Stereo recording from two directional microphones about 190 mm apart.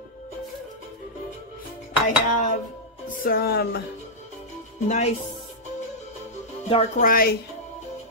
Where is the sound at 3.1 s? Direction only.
50° left (ahead or behind).